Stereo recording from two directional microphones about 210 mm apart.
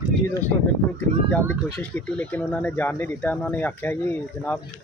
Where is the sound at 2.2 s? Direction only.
5° left (ahead or behind).